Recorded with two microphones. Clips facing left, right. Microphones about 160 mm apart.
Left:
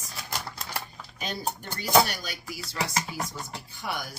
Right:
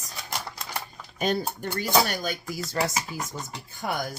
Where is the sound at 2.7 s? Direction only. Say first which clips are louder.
Right 3 dB; 45° right (ahead or behind).